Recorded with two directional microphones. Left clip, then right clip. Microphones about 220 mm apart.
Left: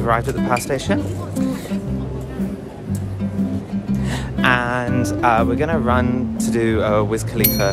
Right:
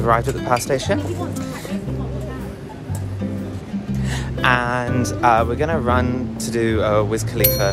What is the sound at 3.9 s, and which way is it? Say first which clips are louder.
Music: left 1 dB; 30° left (ahead or behind).